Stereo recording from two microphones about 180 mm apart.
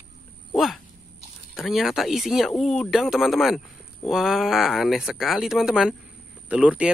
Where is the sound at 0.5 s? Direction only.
Centre (ahead or behind).